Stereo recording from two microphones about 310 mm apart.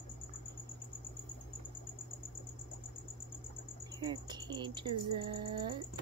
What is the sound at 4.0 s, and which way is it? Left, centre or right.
Speech, centre.